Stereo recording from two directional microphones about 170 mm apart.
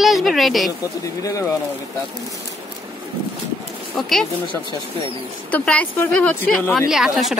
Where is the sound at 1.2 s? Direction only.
20° left (ahead or behind).